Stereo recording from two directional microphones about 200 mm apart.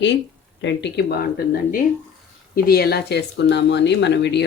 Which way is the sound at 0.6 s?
60° left (ahead or behind).